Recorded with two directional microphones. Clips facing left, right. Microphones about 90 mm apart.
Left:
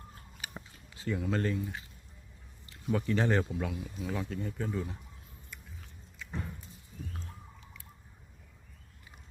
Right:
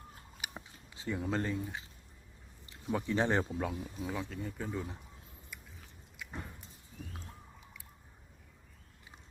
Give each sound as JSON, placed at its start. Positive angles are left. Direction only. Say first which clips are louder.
{"t": 0.4, "sound": "chewing", "louder": "even", "side_deg": -15}
{"t": 0.9, "sound": "speech", "louder": "left 2 dB", "side_deg": -20}
{"t": 4.1, "sound": "speech", "louder": "left 5 dB", "side_deg": 0}
{"t": 5.5, "sound": "chewing", "louder": "left 2 dB", "side_deg": -10}